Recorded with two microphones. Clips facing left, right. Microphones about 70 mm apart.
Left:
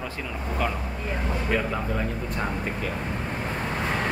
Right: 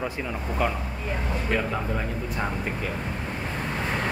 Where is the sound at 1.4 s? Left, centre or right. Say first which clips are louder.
Even; centre.